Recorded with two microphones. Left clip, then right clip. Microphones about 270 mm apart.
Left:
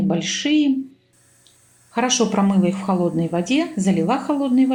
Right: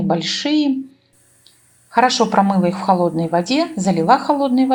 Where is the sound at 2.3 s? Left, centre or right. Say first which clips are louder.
Right 5 dB; right.